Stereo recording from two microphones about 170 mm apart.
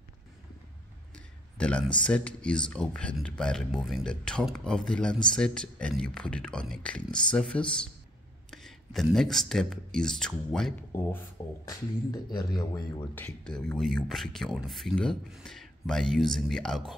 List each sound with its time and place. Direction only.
1.1 s a sound: 5° left (ahead or behind)
2.0 s speech: 5° left (ahead or behind); by 13.0 s 25° left (ahead or behind)
13.1 s speech: 5° left (ahead or behind)